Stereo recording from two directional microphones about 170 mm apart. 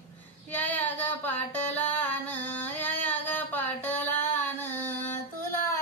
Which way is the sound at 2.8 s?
10° left (ahead or behind).